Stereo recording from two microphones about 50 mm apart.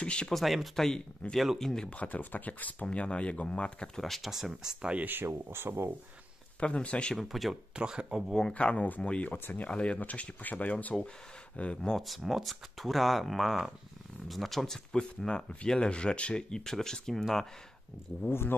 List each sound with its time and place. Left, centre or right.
0.0 s speech: centre
0.3 s speech: centre
1.9 s speech: left
4.0 s speech: centre
4.3 s speech: centre
5.0 s speech: right
6.6 s speech: left
7.2 s speech: centre
7.7 s speech: centre
8.3 s speech: centre
8.5 s speech: left
12.3 s speech: centre
18.2 s speech: left